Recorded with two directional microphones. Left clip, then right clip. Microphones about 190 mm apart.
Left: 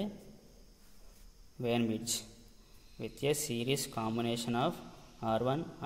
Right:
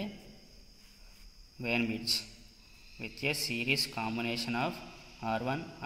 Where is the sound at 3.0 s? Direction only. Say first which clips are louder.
Even; 55° left (ahead or behind).